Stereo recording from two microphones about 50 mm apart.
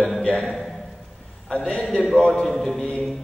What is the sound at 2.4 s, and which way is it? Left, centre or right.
Speech, centre.